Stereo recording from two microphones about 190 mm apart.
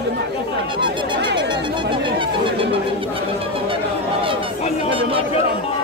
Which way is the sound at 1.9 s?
25° right (ahead or behind).